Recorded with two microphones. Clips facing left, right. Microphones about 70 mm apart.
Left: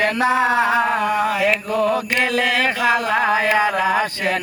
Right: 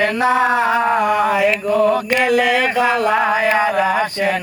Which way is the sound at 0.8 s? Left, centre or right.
Centre.